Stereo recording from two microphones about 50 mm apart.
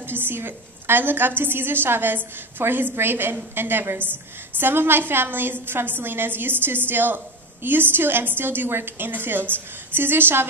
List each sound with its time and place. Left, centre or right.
0.0 s a woman's voice: right